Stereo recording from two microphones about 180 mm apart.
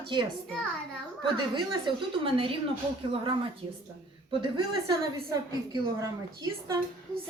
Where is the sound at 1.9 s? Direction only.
25° right (ahead or behind).